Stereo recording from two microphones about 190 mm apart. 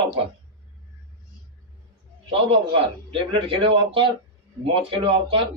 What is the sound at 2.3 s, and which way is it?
A man's voice, 30° right (ahead or behind).